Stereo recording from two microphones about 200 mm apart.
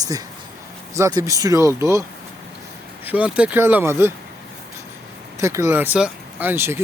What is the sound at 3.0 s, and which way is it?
Speech, 5° right (ahead or behind).